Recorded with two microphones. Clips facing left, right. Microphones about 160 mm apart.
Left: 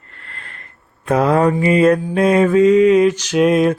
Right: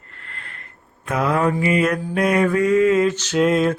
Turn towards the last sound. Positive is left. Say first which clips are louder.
# left 4 dB
turn(degrees=15)  # may be behind; listen again after turning